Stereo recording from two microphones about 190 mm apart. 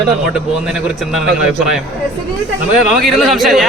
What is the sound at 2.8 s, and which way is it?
Speech, centre (ahead or behind).